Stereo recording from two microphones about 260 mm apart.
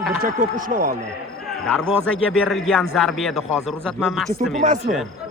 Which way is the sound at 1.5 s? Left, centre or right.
Centre.